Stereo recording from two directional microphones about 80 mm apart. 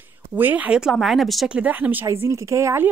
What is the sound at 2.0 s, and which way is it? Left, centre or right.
Speech, right.